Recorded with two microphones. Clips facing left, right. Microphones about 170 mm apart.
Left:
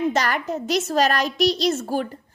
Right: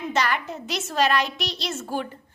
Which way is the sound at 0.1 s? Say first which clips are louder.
Left 2 dB; 40° left (ahead or behind).